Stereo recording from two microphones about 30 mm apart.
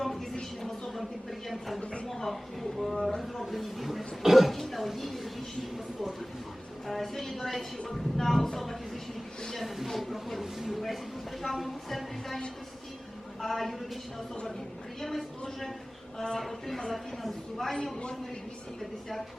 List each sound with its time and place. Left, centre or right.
0.0 s a sound: centre
0.9 s speech: centre
1.8 s speech: left
2.0 s speech: centre
3.4 s speech: centre
4.5 s a sound: centre
4.9 s speech: centre
5.7 s speech: centre
6.8 s a woman's voice: centre
13.4 s speech: centre
16.1 s a man's voice: centre
16.4 s speech: centre